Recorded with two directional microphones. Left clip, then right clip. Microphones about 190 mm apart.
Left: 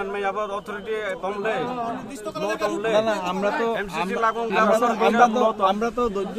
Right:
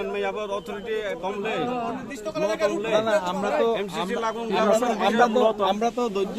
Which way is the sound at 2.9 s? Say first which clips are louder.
Left 2 dB; 55° left (ahead or behind).